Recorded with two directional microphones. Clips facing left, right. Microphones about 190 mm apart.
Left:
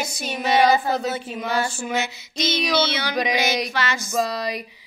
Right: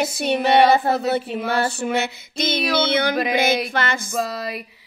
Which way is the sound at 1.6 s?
60° right (ahead or behind).